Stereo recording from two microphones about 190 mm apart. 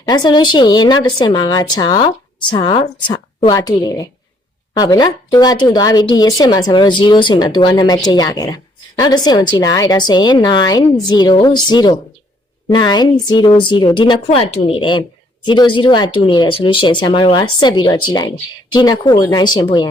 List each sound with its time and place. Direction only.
0.0 s a woman's voice: 20° left (ahead or behind)